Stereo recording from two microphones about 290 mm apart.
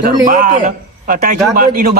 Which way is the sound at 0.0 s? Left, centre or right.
Right.